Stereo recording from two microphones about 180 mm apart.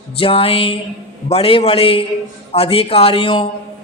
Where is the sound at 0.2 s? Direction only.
30° left (ahead or behind).